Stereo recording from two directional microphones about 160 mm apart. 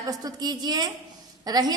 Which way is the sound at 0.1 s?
25° right (ahead or behind).